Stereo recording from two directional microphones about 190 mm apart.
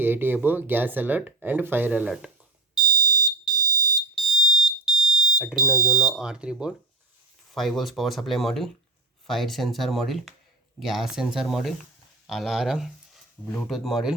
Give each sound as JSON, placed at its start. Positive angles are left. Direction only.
{"t": 0.0, "sound": "speech", "side_deg": -10}
{"t": 2.8, "sound": "smoke detector", "side_deg": -20}
{"t": 4.3, "sound": "smoke detector", "side_deg": 0}
{"t": 7.5, "sound": "speech", "side_deg": 0}